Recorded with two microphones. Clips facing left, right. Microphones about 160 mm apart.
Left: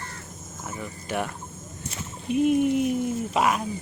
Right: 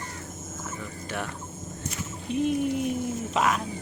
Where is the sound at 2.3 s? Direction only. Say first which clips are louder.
Left 5 dB; 10° left (ahead or behind).